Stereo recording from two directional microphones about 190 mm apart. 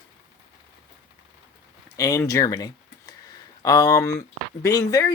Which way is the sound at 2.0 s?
20° left (ahead or behind).